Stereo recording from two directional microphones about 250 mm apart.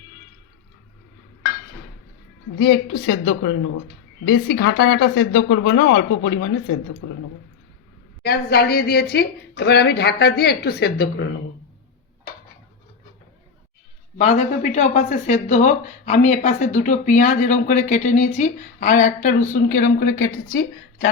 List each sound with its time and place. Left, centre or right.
2.6 s a woman's voice: left
8.2 s a woman's voice: left
14.2 s speech: left
20.5 s speech: left